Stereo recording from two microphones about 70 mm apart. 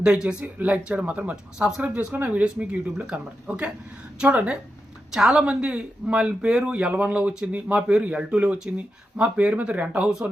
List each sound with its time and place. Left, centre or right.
0.0 s speech: centre
5.1 s speech: centre